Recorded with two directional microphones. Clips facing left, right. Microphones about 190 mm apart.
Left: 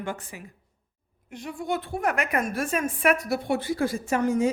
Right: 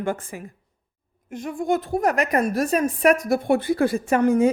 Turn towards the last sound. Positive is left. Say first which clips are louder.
# right 5 dB
turn(degrees=-60)  # may be behind; listen again after turning